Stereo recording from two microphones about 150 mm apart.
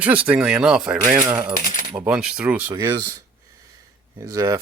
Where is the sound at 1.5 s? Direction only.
65° left (ahead or behind).